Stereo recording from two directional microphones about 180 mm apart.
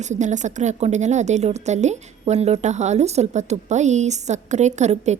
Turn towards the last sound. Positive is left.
turn(degrees=-40)  # may be behind; listen again after turning